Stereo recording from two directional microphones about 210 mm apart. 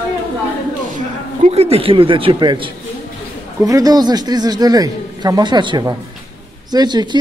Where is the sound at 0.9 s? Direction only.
30° right (ahead or behind).